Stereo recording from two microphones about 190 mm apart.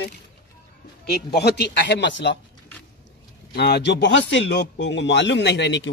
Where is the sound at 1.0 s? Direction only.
60° left (ahead or behind).